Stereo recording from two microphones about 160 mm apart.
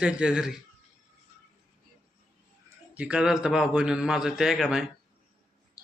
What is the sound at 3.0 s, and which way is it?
Speech, 5° right (ahead or behind).